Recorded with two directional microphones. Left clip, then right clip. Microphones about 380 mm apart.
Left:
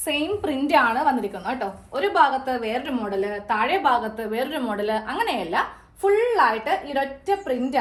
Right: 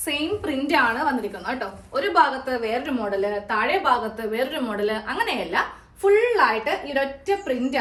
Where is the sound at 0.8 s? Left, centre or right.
Centre.